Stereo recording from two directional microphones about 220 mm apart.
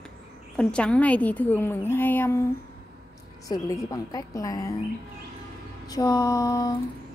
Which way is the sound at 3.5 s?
15° left (ahead or behind).